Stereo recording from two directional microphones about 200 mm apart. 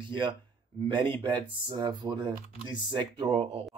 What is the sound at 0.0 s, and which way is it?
A man's voice, 25° right (ahead or behind).